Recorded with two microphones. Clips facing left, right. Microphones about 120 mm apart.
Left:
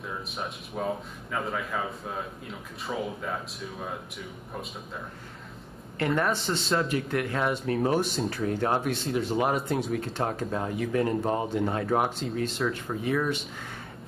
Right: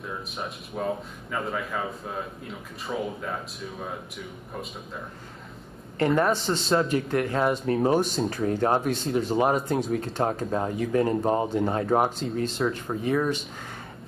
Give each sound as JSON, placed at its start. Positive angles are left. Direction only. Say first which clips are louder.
{"t": 0.0, "sound": "speech", "louder": "right 1 dB", "side_deg": 0}
{"t": 5.9, "sound": "speech", "louder": "right 4 dB", "side_deg": -35}